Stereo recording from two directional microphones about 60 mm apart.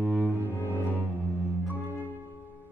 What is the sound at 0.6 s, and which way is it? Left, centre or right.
Cello, left.